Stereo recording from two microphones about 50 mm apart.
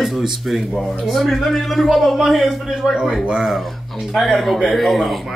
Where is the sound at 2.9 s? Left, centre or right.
Centre.